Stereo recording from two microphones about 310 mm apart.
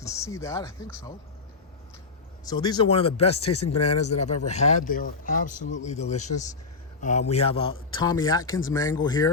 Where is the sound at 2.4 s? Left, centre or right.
Centre.